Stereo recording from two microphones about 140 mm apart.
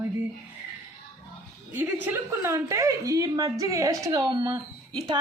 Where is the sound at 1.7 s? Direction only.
15° right (ahead or behind).